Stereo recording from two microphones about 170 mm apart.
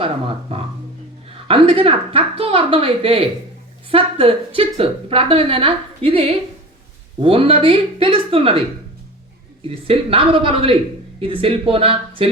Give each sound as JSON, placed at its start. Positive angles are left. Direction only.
{"t": 0.0, "sound": "a woman's voice", "side_deg": -30}
{"t": 9.6, "sound": "a woman's voice", "side_deg": -35}